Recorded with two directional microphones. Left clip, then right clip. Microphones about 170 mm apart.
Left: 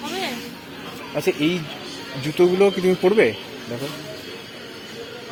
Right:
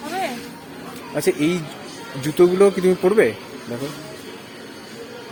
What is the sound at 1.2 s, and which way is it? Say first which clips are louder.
Speech: right 1 dB; 30° right (ahead or behind).